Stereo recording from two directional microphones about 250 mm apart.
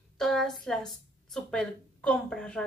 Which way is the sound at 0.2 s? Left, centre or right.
Centre.